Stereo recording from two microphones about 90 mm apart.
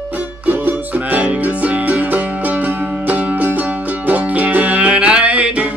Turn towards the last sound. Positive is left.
turn(degrees=-15)  # may be behind; listen again after turning